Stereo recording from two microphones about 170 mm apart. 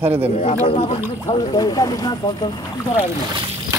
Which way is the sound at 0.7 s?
35° left (ahead or behind).